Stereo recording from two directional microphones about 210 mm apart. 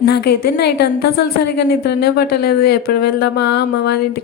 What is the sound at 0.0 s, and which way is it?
A woman's voice, 50° left (ahead or behind).